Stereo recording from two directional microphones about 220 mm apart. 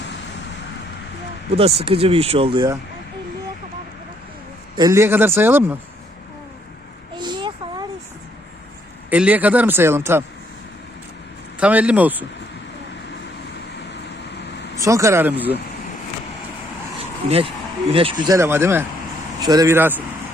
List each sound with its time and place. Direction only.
1.5 s speech: 25° right (ahead or behind)
4.8 s a man's voice: 15° right (ahead or behind)
7.2 s a sound: 20° right (ahead or behind)
9.0 s a man's voice: 5° right (ahead or behind)
11.6 s a man's voice: 5° right (ahead or behind)
14.8 s a man's voice: 15° right (ahead or behind)
17.0 s vehicle: 25° right (ahead or behind)
17.9 s a man's voice: 20° right (ahead or behind)